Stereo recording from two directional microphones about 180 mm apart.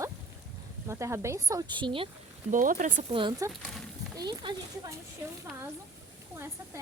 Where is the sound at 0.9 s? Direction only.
15° right (ahead or behind).